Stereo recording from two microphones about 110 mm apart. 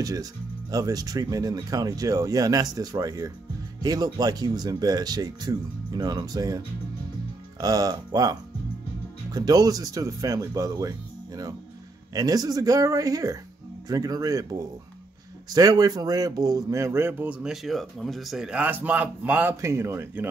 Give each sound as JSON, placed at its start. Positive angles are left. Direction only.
{"t": 0.0, "sound": "speech", "side_deg": -35}
{"t": 19.6, "sound": "speech", "side_deg": -25}